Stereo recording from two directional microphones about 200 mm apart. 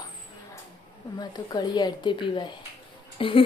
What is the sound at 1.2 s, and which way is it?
A woman's voice, 20° left (ahead or behind).